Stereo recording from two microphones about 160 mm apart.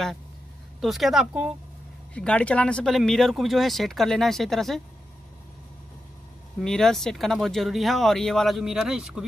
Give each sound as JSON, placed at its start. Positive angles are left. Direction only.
{"t": 0.7, "sound": "speech", "side_deg": 0}
{"t": 2.1, "sound": "speech", "side_deg": 10}
{"t": 6.6, "sound": "speech", "side_deg": 5}